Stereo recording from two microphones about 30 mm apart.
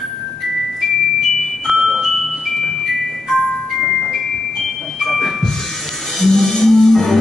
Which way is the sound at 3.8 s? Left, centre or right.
Centre.